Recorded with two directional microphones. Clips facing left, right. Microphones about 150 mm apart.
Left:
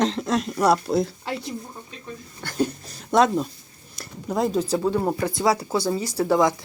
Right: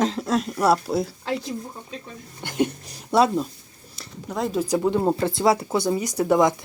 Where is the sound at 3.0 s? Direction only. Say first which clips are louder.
Even; 5° right (ahead or behind); by 6.5 s 20° right (ahead or behind).